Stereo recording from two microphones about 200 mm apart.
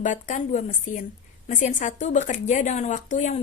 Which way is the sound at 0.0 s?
40° left (ahead or behind).